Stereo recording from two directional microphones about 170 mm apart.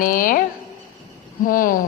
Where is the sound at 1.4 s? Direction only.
55° left (ahead or behind).